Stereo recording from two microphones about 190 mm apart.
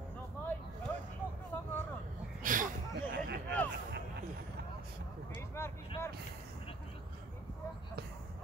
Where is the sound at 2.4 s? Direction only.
45° right (ahead or behind).